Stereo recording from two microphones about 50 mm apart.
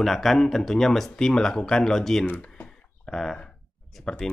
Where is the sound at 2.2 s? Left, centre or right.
Left.